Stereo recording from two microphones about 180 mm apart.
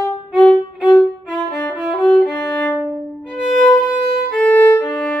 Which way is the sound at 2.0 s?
5° left (ahead or behind).